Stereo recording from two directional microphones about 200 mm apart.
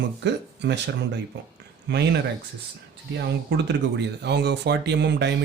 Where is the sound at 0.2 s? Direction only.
60° right (ahead or behind).